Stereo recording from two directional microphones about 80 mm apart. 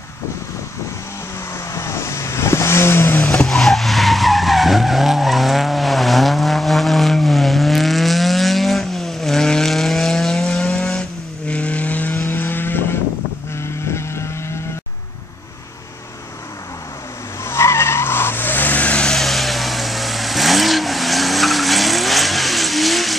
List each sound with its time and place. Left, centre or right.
1.7 s vehicle: left
3.4 s vehicle: centre; by 12.8 s left
13.8 s vehicle: left
17.5 s vehicle: left; by 23.1 s centre